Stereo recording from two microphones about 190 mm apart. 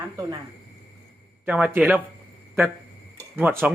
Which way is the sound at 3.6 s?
5° right (ahead or behind).